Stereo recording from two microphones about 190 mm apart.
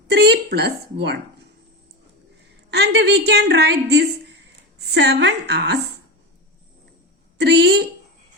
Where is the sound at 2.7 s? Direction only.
60° right (ahead or behind).